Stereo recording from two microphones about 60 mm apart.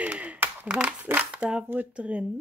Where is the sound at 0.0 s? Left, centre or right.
Right.